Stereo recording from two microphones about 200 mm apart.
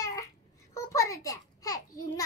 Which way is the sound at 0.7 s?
15° left (ahead or behind).